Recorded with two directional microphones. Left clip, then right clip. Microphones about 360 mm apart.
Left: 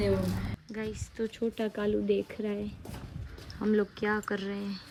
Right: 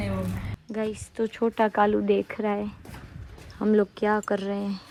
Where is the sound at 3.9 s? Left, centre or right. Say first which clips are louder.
Right 7 dB; centre.